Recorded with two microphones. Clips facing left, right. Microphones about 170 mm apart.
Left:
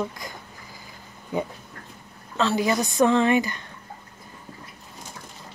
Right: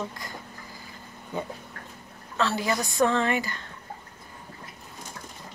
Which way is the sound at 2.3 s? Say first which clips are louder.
Left 4 dB; 20° left (ahead or behind).